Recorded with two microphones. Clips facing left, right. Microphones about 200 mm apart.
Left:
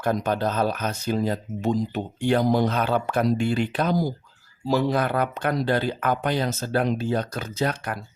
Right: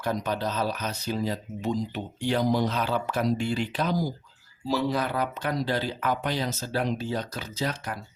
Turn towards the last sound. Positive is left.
turn(degrees=60)  # may be behind; listen again after turning